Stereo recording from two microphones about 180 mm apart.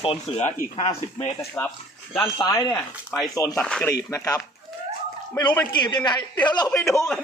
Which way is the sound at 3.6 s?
5° left (ahead or behind).